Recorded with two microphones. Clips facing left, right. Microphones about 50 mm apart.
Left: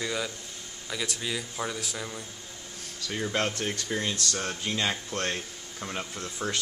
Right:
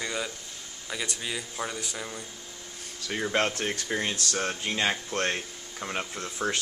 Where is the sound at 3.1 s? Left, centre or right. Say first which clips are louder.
Right 2 dB; centre.